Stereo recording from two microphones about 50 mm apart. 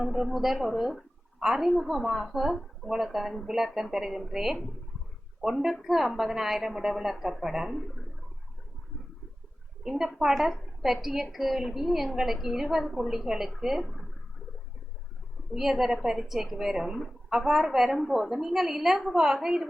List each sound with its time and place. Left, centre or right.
0.0 s a woman's voice: centre
9.8 s a woman's voice: centre
15.5 s a woman's voice: centre